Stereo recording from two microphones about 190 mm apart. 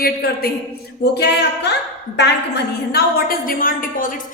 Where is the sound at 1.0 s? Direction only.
60° left (ahead or behind).